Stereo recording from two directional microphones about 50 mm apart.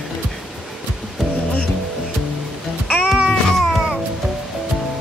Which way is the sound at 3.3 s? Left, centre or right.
Centre.